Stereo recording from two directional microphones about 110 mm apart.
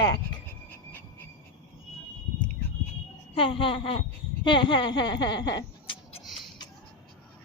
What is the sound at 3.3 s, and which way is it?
Speech, 50° left (ahead or behind).